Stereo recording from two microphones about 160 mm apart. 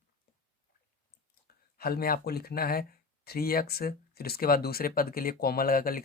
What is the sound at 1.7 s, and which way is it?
Speech, 70° left (ahead or behind).